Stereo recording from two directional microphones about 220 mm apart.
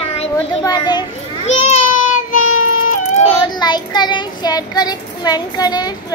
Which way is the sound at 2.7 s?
40° left (ahead or behind).